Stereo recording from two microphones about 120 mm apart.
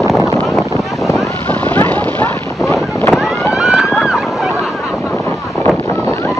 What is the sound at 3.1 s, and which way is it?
Boat, centre (ahead or behind).